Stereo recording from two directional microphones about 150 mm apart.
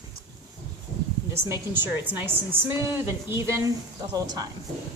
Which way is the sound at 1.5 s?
15° right (ahead or behind).